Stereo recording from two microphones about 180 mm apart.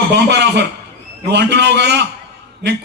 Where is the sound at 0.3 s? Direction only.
70° right (ahead or behind).